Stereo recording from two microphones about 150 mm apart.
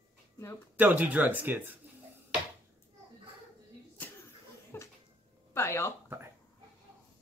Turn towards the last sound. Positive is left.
turn(degrees=-15)  # may be behind; listen again after turning